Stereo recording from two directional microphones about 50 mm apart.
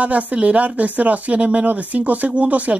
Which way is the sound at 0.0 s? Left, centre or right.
Right.